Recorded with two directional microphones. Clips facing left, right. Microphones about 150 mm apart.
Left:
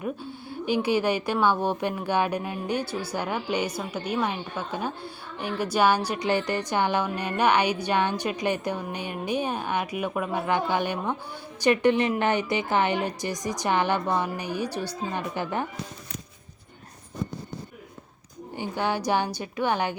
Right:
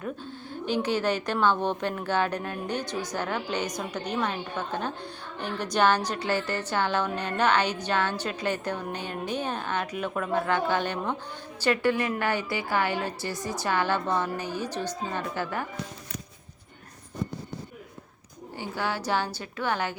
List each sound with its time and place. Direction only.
0.0 s speech: 10° left (ahead or behind)
18.5 s speech: 20° left (ahead or behind)